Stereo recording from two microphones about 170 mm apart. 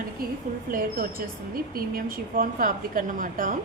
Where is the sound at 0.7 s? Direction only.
55° right (ahead or behind).